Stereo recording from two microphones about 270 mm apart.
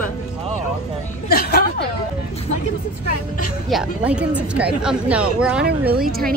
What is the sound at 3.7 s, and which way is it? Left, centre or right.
Speech, centre.